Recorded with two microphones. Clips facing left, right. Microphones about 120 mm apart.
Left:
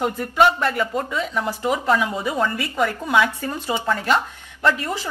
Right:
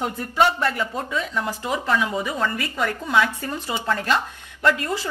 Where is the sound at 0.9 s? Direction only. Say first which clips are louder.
Left 2 dB; 15° left (ahead or behind).